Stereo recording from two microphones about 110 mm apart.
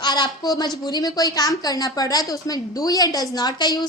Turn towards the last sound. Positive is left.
turn(degrees=40)  # may be behind; listen again after turning